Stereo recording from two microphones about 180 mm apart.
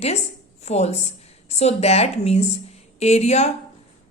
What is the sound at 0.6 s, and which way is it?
A woman's voice, 35° left (ahead or behind).